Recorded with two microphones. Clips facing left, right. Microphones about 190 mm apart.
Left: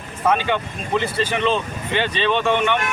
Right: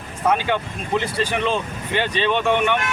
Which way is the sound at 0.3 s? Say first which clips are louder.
Left 1 dB; 10° right (ahead or behind).